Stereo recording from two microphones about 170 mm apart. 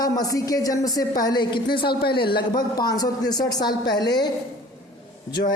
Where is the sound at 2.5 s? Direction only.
25° left (ahead or behind).